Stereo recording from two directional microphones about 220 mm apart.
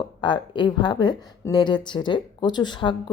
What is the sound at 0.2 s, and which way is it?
Speech, 20° left (ahead or behind).